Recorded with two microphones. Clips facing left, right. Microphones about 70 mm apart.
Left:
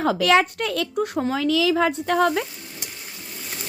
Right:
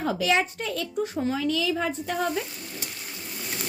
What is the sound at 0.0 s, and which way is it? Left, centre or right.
Speech, left.